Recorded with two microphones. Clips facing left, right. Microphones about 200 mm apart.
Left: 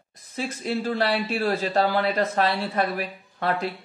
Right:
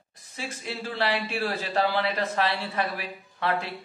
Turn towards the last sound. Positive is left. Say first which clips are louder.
# left 2 dB
turn(degrees=40)  # may be behind; listen again after turning